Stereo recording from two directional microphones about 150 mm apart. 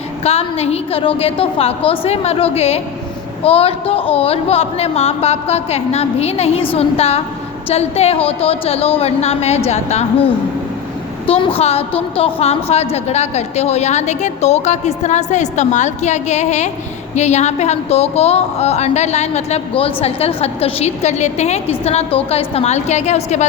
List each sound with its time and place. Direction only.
0.3 s a woman's voice: 45° left (ahead or behind)